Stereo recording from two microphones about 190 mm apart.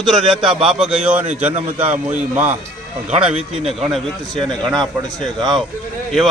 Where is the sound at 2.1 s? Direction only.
5° right (ahead or behind).